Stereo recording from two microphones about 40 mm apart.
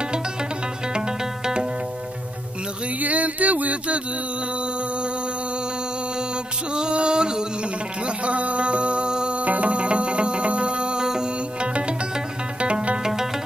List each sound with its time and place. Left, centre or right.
0.9 s music: centre
3.0 s a sound: right
6.7 s music: right
8.2 s music: right
9.4 s music: right; by 11.7 s centre
12.5 s music: right